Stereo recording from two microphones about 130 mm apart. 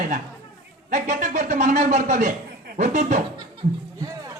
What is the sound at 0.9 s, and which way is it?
A man's voice, 75° right (ahead or behind).